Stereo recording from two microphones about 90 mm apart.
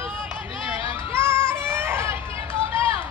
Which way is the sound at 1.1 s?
30° right (ahead or behind).